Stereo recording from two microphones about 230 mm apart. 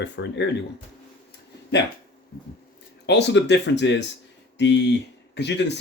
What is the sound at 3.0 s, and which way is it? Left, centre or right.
Speech, left.